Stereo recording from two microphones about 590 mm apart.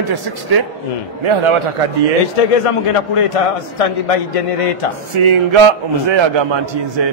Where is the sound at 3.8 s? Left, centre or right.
Left.